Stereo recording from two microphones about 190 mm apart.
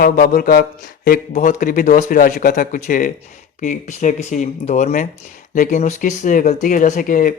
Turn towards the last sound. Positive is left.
turn(degrees=45)  # may be behind; listen again after turning